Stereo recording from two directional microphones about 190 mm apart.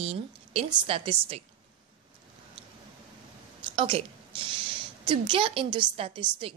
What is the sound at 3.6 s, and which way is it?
A woman's voice, 30° right (ahead or behind).